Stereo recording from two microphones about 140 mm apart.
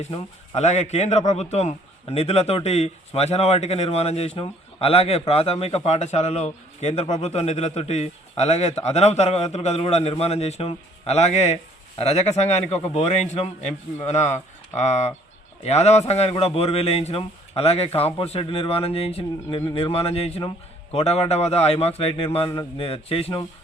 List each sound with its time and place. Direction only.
0.0 s a man's voice: 50° left (ahead or behind)